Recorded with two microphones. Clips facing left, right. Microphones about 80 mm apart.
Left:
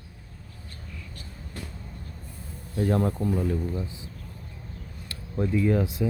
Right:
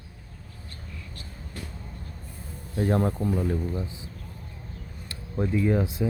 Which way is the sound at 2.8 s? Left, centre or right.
Right.